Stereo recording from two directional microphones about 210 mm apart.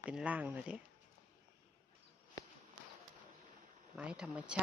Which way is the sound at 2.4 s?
15° left (ahead or behind).